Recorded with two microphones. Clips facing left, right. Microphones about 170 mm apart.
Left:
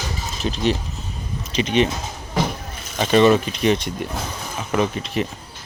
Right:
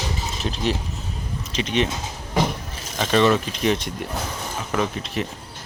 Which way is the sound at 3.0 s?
5° left (ahead or behind).